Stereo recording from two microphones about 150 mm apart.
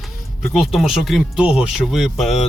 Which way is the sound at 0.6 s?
Centre (ahead or behind).